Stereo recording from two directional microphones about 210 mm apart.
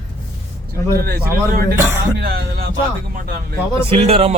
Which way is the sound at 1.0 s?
45° right (ahead or behind).